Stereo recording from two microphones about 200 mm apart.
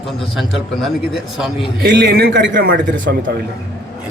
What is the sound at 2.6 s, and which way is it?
Speech, 45° right (ahead or behind).